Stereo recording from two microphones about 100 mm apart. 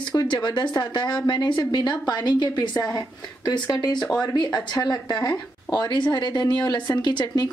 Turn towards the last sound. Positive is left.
turn(degrees=50)  # may be behind; listen again after turning